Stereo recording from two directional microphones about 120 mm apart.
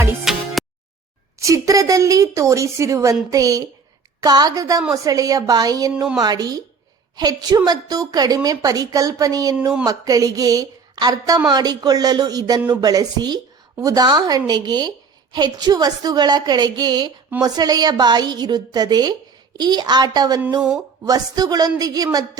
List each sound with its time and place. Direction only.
0.3 s music: 5° right (ahead or behind)
1.4 s a woman's voice: 25° right (ahead or behind)
20.6 s speech: 5° right (ahead or behind)
21.0 s a woman's voice: 30° right (ahead or behind)